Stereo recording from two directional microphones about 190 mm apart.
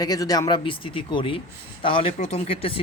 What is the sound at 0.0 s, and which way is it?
Speech, 20° left (ahead or behind).